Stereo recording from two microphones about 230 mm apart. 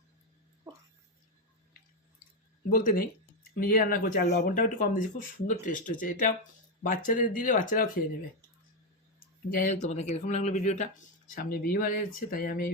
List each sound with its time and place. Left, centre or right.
0.7 s a sound: centre
2.6 s speech: left
9.5 s speech: left